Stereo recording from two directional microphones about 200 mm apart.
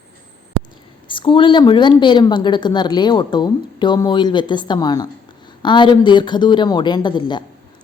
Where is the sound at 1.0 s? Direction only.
25° left (ahead or behind).